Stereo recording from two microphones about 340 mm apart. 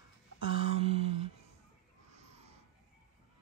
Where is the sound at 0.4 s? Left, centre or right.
Centre.